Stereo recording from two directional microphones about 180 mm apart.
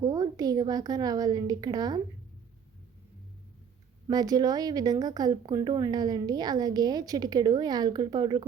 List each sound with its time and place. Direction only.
0.0 s speech: 20° right (ahead or behind)
4.1 s speech: 20° right (ahead or behind)